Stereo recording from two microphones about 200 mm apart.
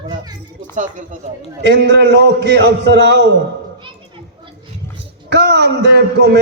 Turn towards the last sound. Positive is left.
turn(degrees=-55)  # may be behind; listen again after turning